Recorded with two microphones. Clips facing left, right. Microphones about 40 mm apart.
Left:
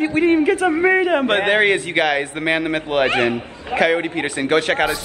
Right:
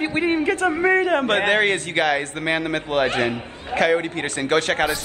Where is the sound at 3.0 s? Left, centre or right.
Left.